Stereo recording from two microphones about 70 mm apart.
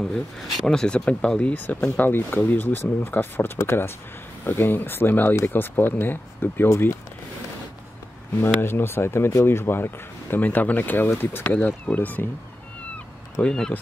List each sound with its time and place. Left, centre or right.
0.0 s speech: centre; by 6.9 s left
8.4 s speech: left
13.4 s speech: centre